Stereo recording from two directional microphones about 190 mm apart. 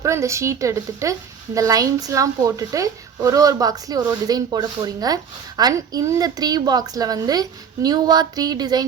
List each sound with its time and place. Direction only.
0.0 s a woman's voice: 15° right (ahead or behind)